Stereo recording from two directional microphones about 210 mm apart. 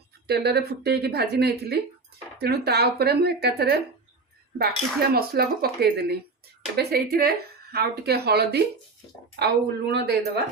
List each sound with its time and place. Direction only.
0.3 s speech: 50° right (ahead or behind)
5.1 s speech: 45° right (ahead or behind)